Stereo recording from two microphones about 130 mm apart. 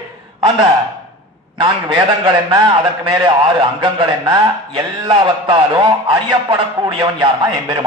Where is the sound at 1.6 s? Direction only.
40° right (ahead or behind).